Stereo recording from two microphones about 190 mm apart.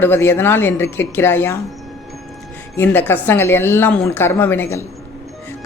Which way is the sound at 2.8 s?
10° left (ahead or behind).